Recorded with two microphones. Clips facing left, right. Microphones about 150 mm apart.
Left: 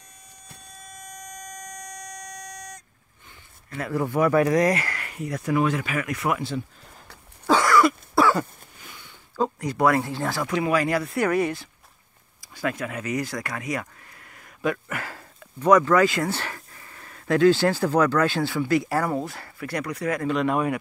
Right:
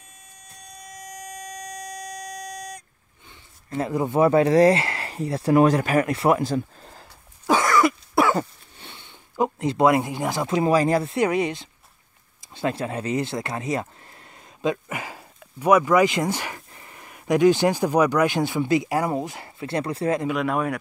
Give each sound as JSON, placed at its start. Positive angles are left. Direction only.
{"t": 3.7, "sound": "speech", "side_deg": -25}
{"t": 7.4, "sound": "cough", "side_deg": -20}
{"t": 10.6, "sound": "speech", "side_deg": -35}
{"t": 20.2, "sound": "speech", "side_deg": -5}